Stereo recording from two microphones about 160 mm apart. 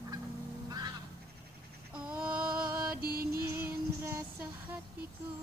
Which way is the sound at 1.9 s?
5° right (ahead or behind).